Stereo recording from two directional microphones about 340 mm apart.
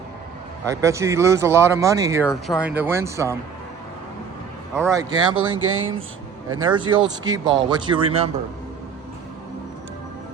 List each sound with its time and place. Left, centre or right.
0.7 s speech: centre
2.2 s speech: centre
2.6 s speech: centre
4.9 s speech: centre
5.5 s speech: right
6.7 s speech: centre